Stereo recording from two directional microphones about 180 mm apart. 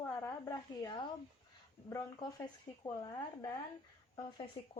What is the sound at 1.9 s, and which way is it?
Speech, 25° left (ahead or behind).